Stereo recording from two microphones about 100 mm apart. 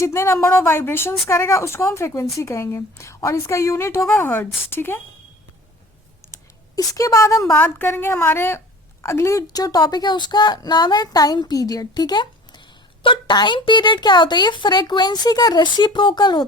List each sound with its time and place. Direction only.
0.0 s a woman's voice: 25° left (ahead or behind)
6.7 s a woman's voice: 35° left (ahead or behind)